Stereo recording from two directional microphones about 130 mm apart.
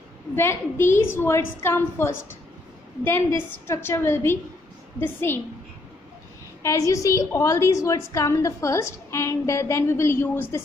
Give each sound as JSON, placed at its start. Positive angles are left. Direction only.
{"t": 0.4, "sound": "a woman's voice", "side_deg": 20}
{"t": 3.1, "sound": "a woman's voice", "side_deg": 20}
{"t": 6.6, "sound": "a woman's voice", "side_deg": 25}